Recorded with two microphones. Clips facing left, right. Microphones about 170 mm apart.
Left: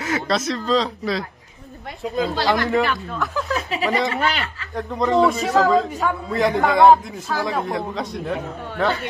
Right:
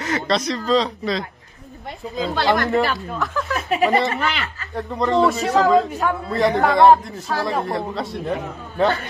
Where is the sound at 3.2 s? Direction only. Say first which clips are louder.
Even; centre (ahead or behind).